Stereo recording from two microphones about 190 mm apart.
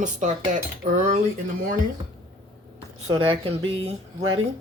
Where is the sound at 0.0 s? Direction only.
40° right (ahead or behind).